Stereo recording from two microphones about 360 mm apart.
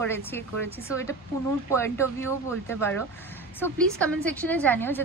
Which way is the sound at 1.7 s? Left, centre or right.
Centre.